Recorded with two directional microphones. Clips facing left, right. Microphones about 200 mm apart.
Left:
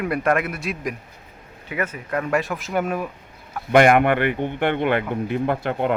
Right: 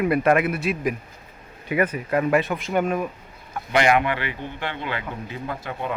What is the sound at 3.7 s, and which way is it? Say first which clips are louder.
Speech: left 5 dB; 55° left (ahead or behind).